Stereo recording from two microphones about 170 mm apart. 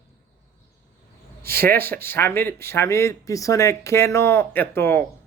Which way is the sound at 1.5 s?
15° left (ahead or behind).